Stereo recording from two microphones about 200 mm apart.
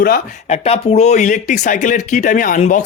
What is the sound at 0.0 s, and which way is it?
Speech, 50° left (ahead or behind).